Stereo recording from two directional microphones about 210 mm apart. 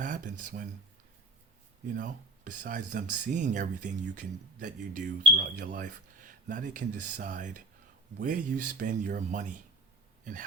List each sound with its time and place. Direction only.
0.0 s speech: 40° right (ahead or behind)
2.0 s speech: 40° right (ahead or behind)